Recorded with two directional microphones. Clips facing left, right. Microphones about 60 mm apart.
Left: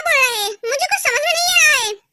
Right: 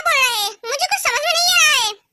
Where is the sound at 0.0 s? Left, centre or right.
Left.